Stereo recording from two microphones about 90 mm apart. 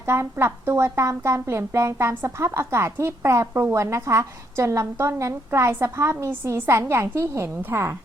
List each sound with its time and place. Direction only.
0.0 s speech: 30° right (ahead or behind)